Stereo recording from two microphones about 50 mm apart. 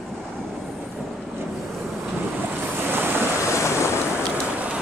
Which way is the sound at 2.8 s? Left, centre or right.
Right.